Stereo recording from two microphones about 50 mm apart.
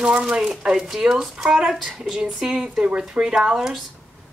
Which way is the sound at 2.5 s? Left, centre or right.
Right.